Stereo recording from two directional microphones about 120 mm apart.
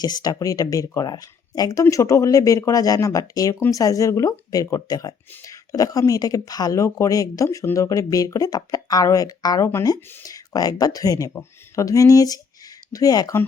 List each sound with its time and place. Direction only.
0.0 s speech: 35° left (ahead or behind)